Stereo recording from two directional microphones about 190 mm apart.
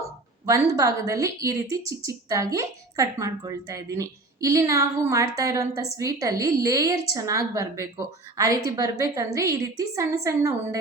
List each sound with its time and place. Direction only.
0.4 s a woman's voice: 15° right (ahead or behind)